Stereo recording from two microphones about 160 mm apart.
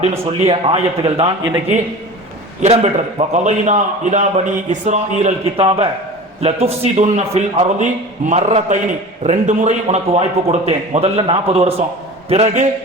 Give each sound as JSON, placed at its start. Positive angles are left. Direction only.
{"t": 0.3, "sound": "a man's voice", "side_deg": -35}
{"t": 2.6, "sound": "a man's voice", "side_deg": -45}
{"t": 5.6, "sound": "a man's voice", "side_deg": -30}